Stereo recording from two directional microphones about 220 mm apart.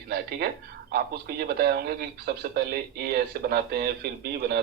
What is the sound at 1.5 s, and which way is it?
Speech, 45° right (ahead or behind).